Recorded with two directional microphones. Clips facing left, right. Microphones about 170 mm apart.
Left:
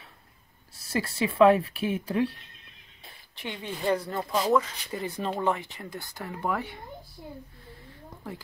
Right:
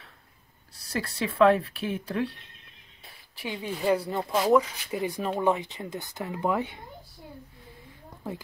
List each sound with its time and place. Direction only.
0.9 s speech: 5° left (ahead or behind)
3.3 s speech: 10° right (ahead or behind)